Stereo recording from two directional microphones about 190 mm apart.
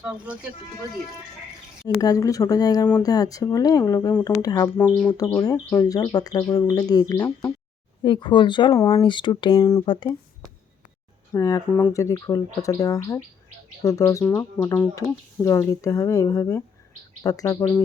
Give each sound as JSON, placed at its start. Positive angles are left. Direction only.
{"t": 0.0, "sound": "speech", "side_deg": -5}
{"t": 2.0, "sound": "speech", "side_deg": 20}
{"t": 11.3, "sound": "speech", "side_deg": 20}